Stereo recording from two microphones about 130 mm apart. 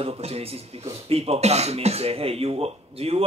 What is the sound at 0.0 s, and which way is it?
Speech, 50° right (ahead or behind).